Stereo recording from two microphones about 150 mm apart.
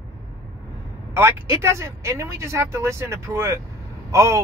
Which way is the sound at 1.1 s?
20° right (ahead or behind).